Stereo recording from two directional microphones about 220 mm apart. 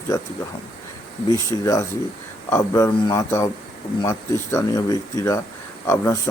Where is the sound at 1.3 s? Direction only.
15° left (ahead or behind).